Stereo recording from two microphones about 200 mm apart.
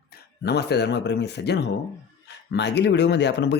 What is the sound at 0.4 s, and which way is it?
Speech, 55° left (ahead or behind).